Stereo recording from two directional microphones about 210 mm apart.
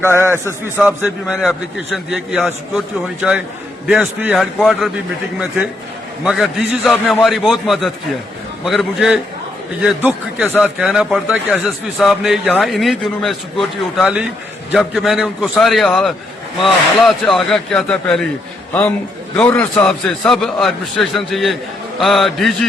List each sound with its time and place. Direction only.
0.4 s speech: 5° right (ahead or behind)
6.2 s a man's voice: centre (ahead or behind)